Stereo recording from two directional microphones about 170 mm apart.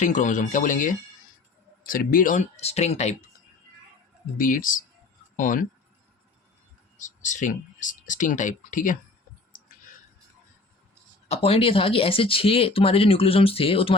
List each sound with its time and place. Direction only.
0.0 s speech: 45° left (ahead or behind)
4.4 s speech: 55° left (ahead or behind)
7.0 s speech: 45° left (ahead or behind)
11.3 s speech: 35° left (ahead or behind)